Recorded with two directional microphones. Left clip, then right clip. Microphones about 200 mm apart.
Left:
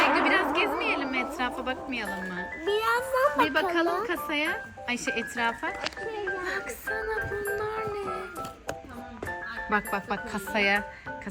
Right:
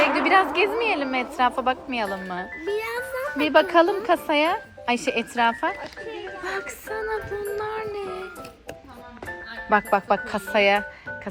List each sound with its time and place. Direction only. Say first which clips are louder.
0.0 s a sound: right 4 dB; centre (ahead or behind)
0.6 s speech: right 5 dB; 5° right (ahead or behind)
3.4 s speech: right 7 dB; 10° right (ahead or behind)
4.9 s speech: right 6 dB; centre (ahead or behind)
6.4 s music: right 2 dB; centre (ahead or behind)
9.6 s speech: right 9 dB; 5° right (ahead or behind)